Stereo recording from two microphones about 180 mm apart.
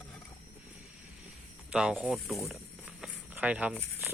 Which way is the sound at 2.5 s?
5° right (ahead or behind).